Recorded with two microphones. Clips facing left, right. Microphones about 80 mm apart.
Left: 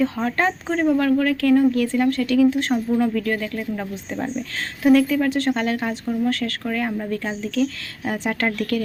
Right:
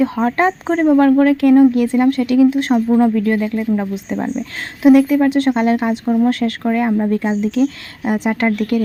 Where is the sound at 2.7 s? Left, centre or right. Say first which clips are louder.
Right 7 dB; right.